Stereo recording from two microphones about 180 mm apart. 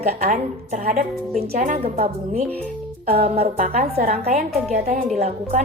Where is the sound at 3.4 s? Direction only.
55° right (ahead or behind).